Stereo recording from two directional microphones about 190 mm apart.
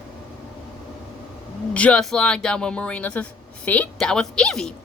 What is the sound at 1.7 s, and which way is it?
Speech, 5° left (ahead or behind).